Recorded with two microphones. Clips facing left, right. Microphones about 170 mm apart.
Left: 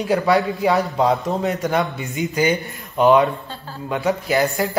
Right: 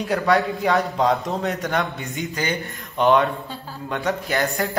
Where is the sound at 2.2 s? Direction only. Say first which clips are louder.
Left 8 dB; 15° left (ahead or behind).